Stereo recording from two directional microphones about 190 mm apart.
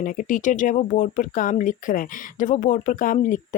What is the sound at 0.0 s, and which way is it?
Speech, 45° left (ahead or behind).